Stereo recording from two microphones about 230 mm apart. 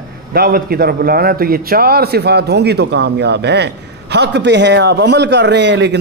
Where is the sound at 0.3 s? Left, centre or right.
Right.